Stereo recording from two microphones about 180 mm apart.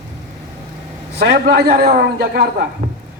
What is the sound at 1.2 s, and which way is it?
A man's voice, 65° right (ahead or behind).